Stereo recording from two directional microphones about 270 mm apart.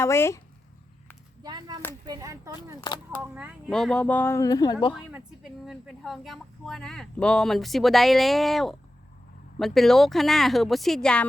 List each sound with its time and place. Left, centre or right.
0.0 s speech: centre
1.5 s a sound: centre
2.0 s speech: centre
4.9 s a woman's voice: centre